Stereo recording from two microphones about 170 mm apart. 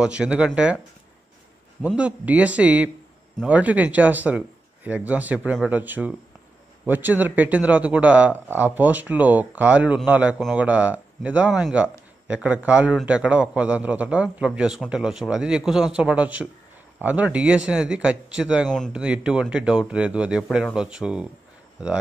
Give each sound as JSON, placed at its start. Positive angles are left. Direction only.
{"t": 0.0, "sound": "a man's voice", "side_deg": -5}
{"t": 1.8, "sound": "a man's voice", "side_deg": -5}